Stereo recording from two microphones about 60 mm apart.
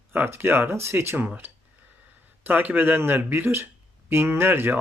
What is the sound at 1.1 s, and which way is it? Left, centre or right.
Speech, right.